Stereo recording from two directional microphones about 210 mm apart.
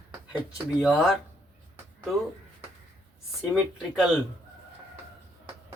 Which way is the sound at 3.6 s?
Centre (ahead or behind).